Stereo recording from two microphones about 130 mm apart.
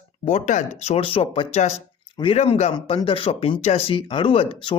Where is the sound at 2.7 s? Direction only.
40° left (ahead or behind).